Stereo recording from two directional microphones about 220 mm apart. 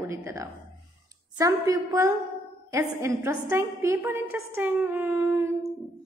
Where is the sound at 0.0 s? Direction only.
10° right (ahead or behind).